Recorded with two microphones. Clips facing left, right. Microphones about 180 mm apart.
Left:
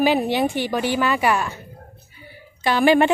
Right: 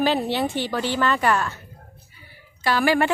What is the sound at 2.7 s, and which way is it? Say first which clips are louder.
Speech: left 4 dB; 20° left (ahead or behind).